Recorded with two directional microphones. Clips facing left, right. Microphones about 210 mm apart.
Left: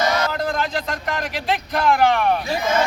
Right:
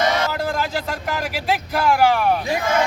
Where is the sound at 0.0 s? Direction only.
25° right (ahead or behind).